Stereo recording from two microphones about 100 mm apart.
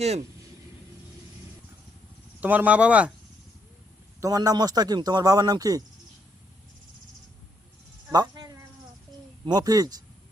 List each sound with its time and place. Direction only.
2.4 s speech: 15° right (ahead or behind)
4.2 s a man's voice: 40° right (ahead or behind)
8.1 s speech: 40° right (ahead or behind)
9.5 s a man's voice: 40° right (ahead or behind)